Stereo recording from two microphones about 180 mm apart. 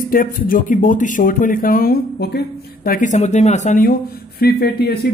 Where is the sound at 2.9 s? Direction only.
45° left (ahead or behind).